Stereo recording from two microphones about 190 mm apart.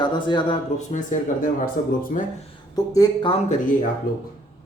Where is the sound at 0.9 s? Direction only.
40° left (ahead or behind).